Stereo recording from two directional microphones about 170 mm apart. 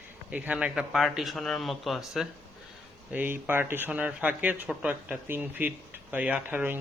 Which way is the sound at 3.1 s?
10° right (ahead or behind).